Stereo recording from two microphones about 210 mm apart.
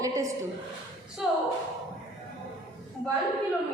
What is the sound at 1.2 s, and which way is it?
Speech, centre (ahead or behind).